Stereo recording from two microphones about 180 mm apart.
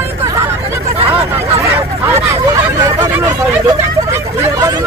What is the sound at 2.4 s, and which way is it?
Hubbub, 15° right (ahead or behind).